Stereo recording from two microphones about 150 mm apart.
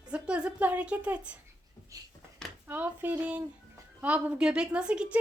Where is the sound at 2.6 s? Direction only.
15° right (ahead or behind).